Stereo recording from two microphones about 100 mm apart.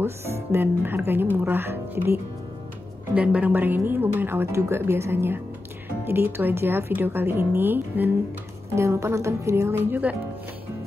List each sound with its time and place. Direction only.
0.0 s a woman's voice: 25° right (ahead or behind)
3.2 s a woman's voice: 15° right (ahead or behind)